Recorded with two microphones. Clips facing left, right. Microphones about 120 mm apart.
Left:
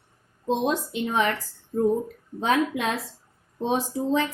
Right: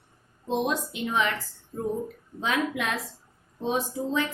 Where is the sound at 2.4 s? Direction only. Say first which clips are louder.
Left 4 dB; 30° left (ahead or behind).